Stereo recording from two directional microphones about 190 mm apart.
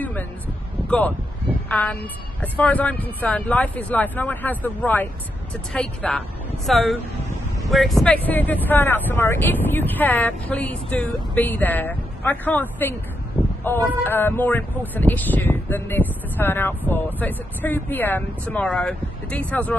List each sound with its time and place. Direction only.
0.8 s a woman's voice: 10° left (ahead or behind)